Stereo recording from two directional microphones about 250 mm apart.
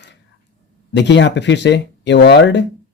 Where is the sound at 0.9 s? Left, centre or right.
Left.